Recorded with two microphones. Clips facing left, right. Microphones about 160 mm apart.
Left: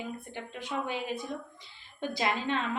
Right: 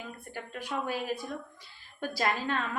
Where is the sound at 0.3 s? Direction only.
20° left (ahead or behind).